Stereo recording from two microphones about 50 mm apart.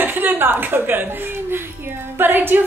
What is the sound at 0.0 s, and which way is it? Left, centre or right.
A woman's voice, right.